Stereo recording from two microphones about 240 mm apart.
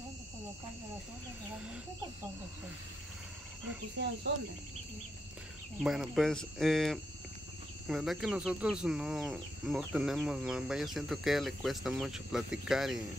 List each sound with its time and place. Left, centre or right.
4.0 s speech: right
5.8 s speech: centre